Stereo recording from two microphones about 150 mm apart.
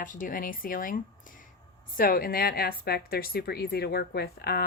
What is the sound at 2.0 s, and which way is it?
A woman's voice, 75° left (ahead or behind).